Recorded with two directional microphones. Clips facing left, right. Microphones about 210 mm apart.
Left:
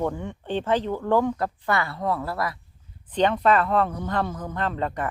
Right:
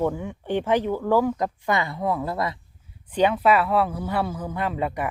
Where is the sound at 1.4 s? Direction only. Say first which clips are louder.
Right 1 dB; 15° right (ahead or behind).